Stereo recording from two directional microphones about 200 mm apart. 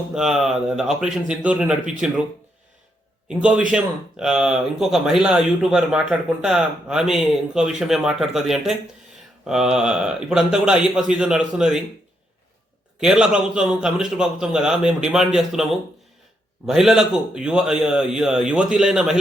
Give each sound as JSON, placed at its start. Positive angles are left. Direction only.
{"t": 0.1, "sound": "speech", "side_deg": 0}
{"t": 3.2, "sound": "speech", "side_deg": -5}
{"t": 13.0, "sound": "speech", "side_deg": -5}
{"t": 16.6, "sound": "speech", "side_deg": 0}